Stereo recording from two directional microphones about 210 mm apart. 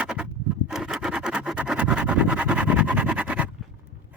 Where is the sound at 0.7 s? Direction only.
5° right (ahead or behind).